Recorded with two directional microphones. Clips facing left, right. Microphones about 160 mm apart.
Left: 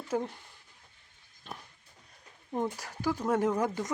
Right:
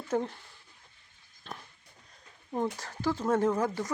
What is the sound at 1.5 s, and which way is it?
Pig, 10° left (ahead or behind).